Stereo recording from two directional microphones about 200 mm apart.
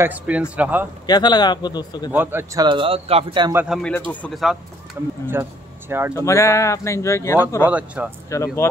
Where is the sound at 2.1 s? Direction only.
15° right (ahead or behind).